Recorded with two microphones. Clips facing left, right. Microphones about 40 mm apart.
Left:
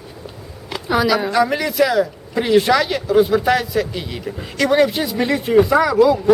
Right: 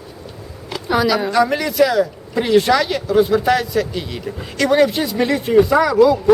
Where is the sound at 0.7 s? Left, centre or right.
Centre.